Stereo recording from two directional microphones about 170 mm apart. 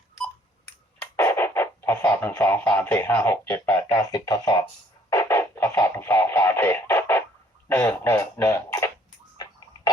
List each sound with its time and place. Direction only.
1.1 s speech: 15° left (ahead or behind)
5.0 s a sound: 15° left (ahead or behind)
7.7 s speech: 15° left (ahead or behind)